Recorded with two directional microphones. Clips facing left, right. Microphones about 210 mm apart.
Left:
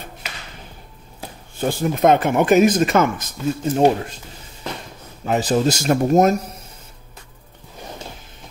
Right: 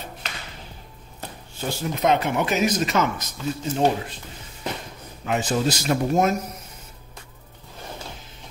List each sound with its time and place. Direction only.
1.6 s speech: 50° left (ahead or behind)
5.2 s speech: 35° left (ahead or behind)